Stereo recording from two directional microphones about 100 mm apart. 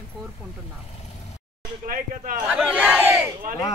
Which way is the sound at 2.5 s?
10° right (ahead or behind).